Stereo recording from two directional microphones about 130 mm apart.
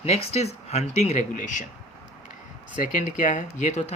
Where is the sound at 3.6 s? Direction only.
60° left (ahead or behind).